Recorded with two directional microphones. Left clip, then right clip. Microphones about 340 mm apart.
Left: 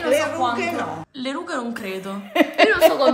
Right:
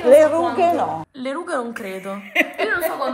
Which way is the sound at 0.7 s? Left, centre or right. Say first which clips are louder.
Right 5 dB; centre.